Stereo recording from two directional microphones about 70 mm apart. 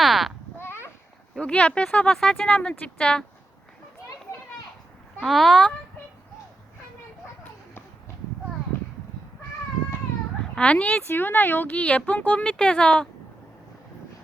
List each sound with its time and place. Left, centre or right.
0.0 s a sound: centre
1.4 s speech: centre
5.2 s speech: centre
10.5 s speech: centre
11.1 s speech: left